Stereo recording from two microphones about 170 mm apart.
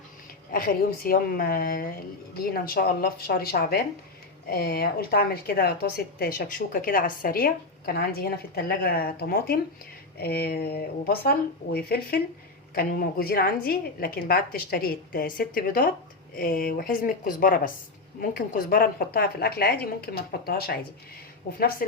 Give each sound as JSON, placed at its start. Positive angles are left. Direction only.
{"t": 0.5, "sound": "a woman's voice", "side_deg": 60}